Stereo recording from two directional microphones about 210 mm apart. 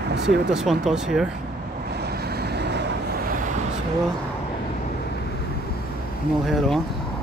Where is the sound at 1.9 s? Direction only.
50° right (ahead or behind).